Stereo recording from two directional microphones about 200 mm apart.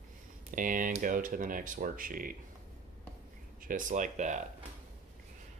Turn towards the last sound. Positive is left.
turn(degrees=-40)  # may be behind; listen again after turning